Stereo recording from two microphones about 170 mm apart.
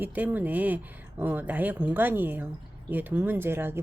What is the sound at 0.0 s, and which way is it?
Speech, 10° right (ahead or behind).